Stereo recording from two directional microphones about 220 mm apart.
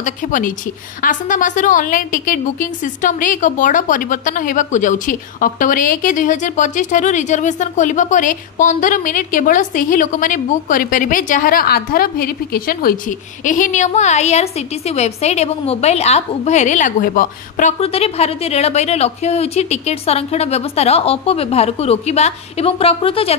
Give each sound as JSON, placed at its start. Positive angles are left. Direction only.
{"t": 0.0, "sound": "a woman's voice", "side_deg": 35}